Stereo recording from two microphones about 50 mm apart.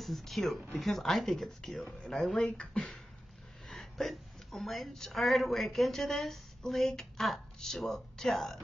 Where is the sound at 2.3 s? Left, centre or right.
Left.